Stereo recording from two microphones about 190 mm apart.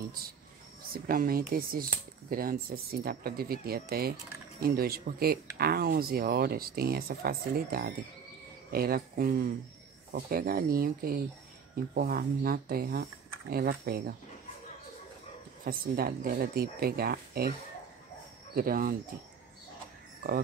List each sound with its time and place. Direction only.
0.9 s speech: 50° right (ahead or behind)
15.6 s speech: 50° right (ahead or behind)